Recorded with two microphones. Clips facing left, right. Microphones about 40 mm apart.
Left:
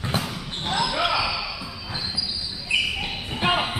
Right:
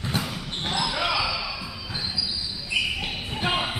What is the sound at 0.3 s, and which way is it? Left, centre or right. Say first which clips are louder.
Basketball bounce: left 1 dB; centre.